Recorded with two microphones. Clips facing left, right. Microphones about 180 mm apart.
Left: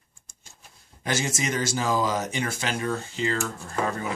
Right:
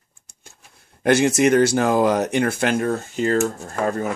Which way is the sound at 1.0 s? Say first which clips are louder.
Right 12 dB; 60° right (ahead or behind).